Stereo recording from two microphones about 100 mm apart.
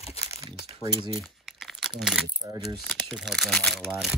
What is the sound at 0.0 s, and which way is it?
Crumpling, 90° left.